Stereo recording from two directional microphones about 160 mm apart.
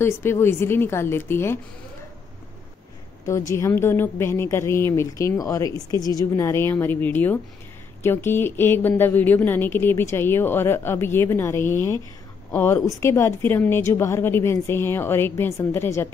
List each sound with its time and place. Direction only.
0.0 s a woman's voice: 15° left (ahead or behind)
3.3 s a woman's voice: 20° left (ahead or behind)